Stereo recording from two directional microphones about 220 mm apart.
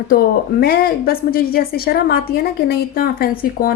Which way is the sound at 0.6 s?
45° left (ahead or behind).